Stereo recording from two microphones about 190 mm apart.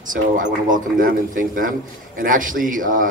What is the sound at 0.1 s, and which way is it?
A man's voice, 45° right (ahead or behind).